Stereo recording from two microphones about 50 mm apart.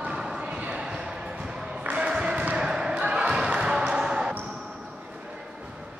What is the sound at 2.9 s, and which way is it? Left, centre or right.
Basketball bounce, right.